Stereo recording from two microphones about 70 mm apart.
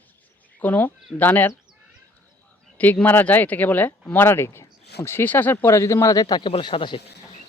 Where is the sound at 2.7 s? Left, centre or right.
Left.